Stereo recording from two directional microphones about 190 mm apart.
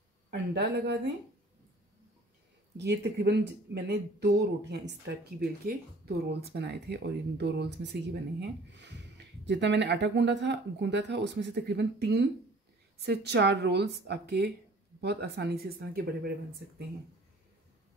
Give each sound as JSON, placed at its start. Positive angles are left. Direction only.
{"t": 0.7, "sound": "speech", "side_deg": -65}
{"t": 2.8, "sound": "speech", "side_deg": -60}